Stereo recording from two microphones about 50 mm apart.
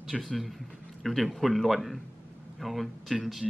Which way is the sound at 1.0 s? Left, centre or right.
Centre.